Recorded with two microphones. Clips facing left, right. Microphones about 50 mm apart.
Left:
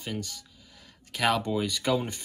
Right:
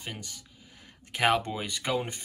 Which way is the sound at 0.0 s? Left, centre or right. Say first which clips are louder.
Left 5 dB; right.